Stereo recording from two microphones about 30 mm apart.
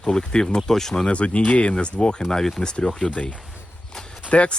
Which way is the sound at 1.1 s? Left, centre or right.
Left.